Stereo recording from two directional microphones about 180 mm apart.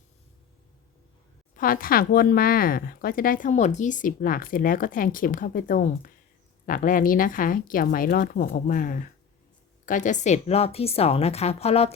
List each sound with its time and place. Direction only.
1.5 s a woman's voice: 50° left (ahead or behind); by 11.9 s 35° left (ahead or behind)